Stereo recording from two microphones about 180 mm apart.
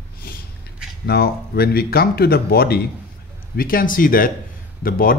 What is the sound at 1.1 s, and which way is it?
Speech, 60° left (ahead or behind).